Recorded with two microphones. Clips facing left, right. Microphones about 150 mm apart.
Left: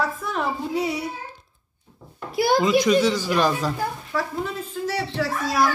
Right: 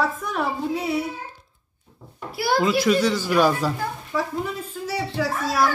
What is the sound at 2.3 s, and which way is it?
Speech, 20° left (ahead or behind).